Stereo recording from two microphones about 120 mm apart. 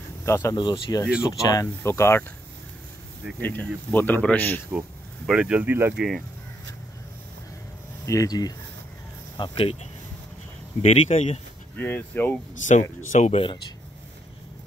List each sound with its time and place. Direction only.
0.2 s speech: 25° left (ahead or behind)
0.6 s speech: 35° left (ahead or behind)
1.5 s speech: 25° left (ahead or behind)
3.4 s speech: 15° left (ahead or behind)
5.2 s speech: 5° right (ahead or behind)
5.9 s speech: centre (ahead or behind)
8.0 s speech: 25° left (ahead or behind)
9.4 s speech: 45° left (ahead or behind)
10.8 s speech: 60° left (ahead or behind)
11.7 s speech: 15° left (ahead or behind)
12.6 s speech: 90° left
13.3 s speech: 50° left (ahead or behind)